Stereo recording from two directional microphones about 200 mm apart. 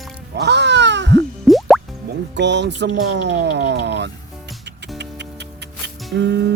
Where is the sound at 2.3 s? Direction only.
60° right (ahead or behind).